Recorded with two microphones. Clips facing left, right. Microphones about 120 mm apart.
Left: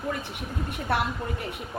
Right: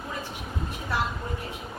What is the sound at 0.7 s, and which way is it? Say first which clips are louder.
Speech: left 4 dB; 60° left (ahead or behind).